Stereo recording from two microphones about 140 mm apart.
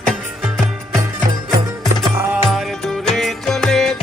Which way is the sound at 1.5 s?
Centre (ahead or behind).